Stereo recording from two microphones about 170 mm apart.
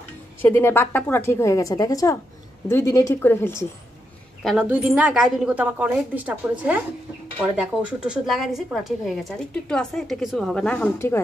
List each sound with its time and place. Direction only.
0.4 s a woman's voice: 15° left (ahead or behind)
4.4 s a woman's voice: centre (ahead or behind)